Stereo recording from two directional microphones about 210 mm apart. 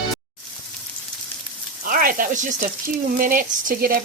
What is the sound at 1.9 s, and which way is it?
Sizzle, 40° right (ahead or behind).